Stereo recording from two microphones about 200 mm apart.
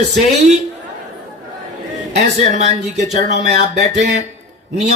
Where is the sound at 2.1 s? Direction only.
35° right (ahead or behind).